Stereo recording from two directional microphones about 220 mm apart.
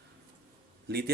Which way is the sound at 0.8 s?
45° right (ahead or behind).